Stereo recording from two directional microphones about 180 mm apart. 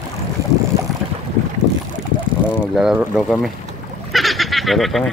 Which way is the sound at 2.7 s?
5° right (ahead or behind).